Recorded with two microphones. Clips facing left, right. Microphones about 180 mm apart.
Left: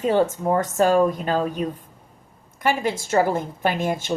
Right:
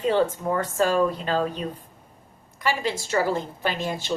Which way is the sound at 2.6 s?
50° left (ahead or behind).